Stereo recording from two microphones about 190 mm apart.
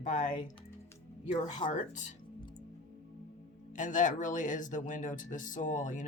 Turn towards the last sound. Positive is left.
turn(degrees=40)  # may be behind; listen again after turning